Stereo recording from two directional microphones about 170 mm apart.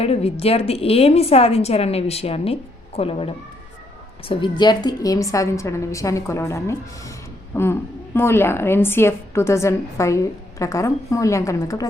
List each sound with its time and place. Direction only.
0.0 s a woman's voice: 35° left (ahead or behind)
4.3 s a woman's voice: 25° left (ahead or behind)